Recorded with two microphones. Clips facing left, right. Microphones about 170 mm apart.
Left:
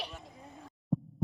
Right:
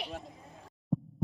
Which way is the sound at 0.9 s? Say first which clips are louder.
Even; centre (ahead or behind).